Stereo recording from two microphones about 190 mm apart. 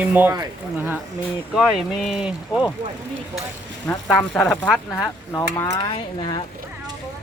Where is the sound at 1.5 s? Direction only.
Centre (ahead or behind).